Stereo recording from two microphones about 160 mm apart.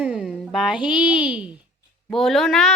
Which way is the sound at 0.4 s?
Centre (ahead or behind).